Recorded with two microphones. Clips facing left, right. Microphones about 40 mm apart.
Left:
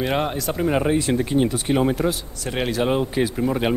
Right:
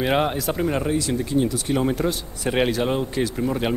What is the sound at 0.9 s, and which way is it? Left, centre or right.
Speech, left.